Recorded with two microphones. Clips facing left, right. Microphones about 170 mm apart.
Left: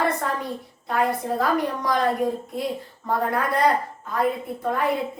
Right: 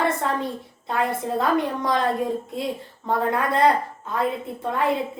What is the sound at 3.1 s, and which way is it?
Speech, 25° right (ahead or behind).